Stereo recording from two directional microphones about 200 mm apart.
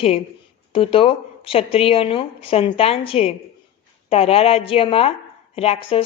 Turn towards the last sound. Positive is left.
turn(degrees=25)  # may be behind; listen again after turning